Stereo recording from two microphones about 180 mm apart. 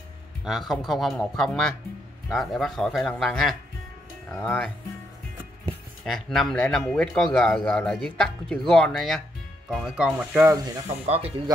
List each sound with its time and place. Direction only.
0.5 s speech: centre (ahead or behind)
6.0 s speech: centre (ahead or behind)
11.1 s speech: 35° right (ahead or behind)